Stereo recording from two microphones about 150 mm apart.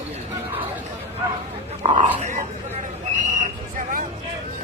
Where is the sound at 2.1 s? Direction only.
50° right (ahead or behind).